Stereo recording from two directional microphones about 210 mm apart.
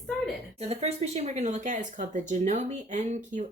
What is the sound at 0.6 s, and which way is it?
Speech, 30° right (ahead or behind).